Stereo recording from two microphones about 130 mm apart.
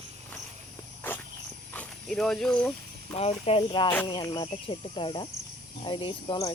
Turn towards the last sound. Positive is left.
turn(degrees=40)  # may be behind; listen again after turning